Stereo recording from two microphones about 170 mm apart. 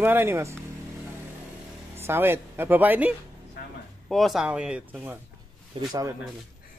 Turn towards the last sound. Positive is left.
turn(degrees=-20)  # may be behind; listen again after turning